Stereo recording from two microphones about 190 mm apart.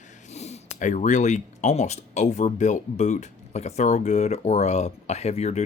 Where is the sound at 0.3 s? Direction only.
35° left (ahead or behind).